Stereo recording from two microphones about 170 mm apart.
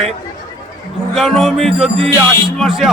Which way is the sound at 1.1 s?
Centre (ahead or behind).